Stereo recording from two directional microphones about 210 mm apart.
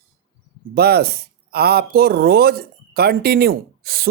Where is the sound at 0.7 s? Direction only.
50° right (ahead or behind).